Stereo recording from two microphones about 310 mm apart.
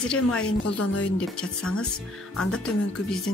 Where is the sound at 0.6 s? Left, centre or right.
Left.